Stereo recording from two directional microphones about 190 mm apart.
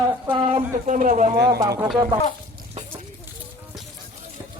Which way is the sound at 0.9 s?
40° right (ahead or behind).